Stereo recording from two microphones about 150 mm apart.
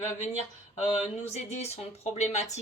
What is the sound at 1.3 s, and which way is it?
A woman's voice, 45° left (ahead or behind).